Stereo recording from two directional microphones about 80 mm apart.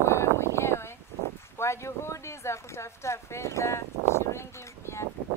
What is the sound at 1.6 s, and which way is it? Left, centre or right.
Speech, left.